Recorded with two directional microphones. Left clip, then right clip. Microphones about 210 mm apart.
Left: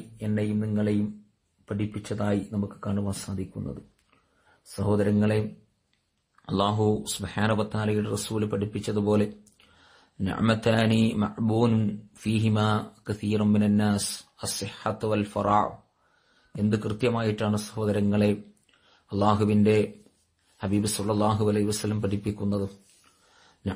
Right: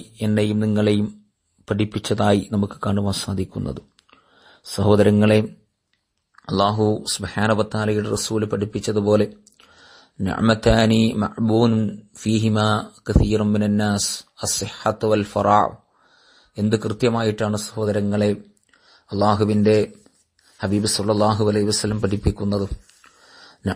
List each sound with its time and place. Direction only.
0.2 s speech: 45° right (ahead or behind)
4.7 s speech: 40° right (ahead or behind)